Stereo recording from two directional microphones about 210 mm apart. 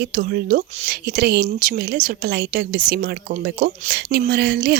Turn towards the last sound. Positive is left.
turn(degrees=-45)  # may be behind; listen again after turning